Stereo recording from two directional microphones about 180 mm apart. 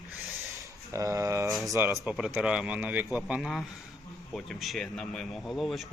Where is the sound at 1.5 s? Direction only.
Centre (ahead or behind).